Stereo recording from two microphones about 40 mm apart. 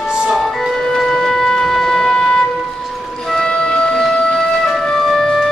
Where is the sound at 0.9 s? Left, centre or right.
Centre.